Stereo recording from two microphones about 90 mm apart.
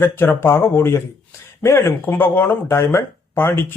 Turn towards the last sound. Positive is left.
turn(degrees=25)  # may be behind; listen again after turning